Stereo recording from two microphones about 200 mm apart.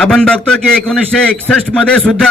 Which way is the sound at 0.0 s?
5° left (ahead or behind).